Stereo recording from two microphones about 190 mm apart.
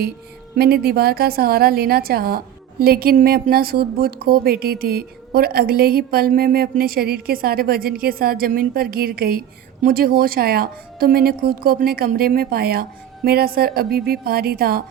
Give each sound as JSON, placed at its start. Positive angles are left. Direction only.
{"t": 0.5, "sound": "a woman's voice", "side_deg": -55}